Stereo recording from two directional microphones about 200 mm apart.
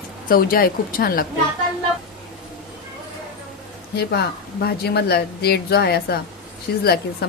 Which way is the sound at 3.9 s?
55° left (ahead or behind).